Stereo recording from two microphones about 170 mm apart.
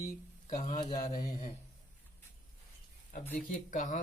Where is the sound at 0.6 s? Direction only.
45° left (ahead or behind).